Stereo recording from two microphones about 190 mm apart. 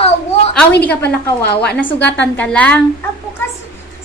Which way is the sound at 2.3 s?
5° left (ahead or behind).